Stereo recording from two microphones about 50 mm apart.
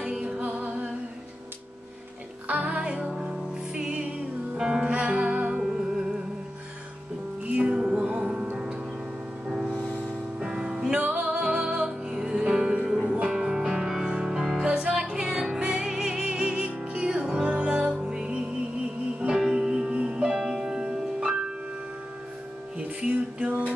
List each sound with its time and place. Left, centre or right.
0.0 s music: centre
0.4 s music: right
2.4 s music: right
3.0 s music: centre
5.6 s music: centre
7.4 s music: right
9.5 s music: centre
11.0 s music: right
13.4 s music: centre
22.8 s music: right